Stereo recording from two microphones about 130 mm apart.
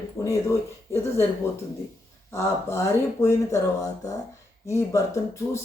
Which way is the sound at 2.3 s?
20° left (ahead or behind).